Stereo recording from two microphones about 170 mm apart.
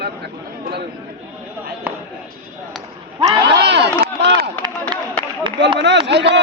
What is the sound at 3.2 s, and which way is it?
Speech, 30° right (ahead or behind).